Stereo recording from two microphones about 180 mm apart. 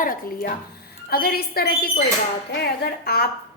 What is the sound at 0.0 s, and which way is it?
A woman's voice, 50° left (ahead or behind).